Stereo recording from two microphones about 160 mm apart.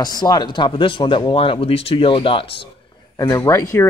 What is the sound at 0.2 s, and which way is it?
Speech, 25° left (ahead or behind).